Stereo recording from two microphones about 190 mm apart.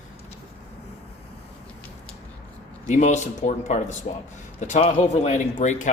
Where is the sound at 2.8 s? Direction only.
40° left (ahead or behind).